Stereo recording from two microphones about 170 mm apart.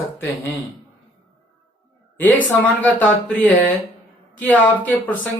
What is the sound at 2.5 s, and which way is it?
A man's voice, 10° left (ahead or behind).